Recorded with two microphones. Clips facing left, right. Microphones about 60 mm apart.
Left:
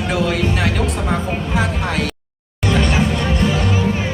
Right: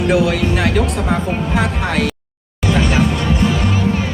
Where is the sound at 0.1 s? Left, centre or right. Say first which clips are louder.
Right 2 dB; centre.